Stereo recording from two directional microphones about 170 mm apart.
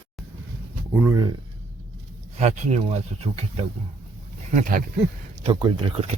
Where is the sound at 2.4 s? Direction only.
40° right (ahead or behind).